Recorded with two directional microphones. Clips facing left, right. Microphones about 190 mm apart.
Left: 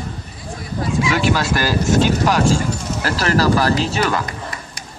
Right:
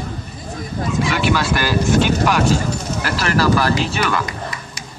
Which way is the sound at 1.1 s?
40° left (ahead or behind).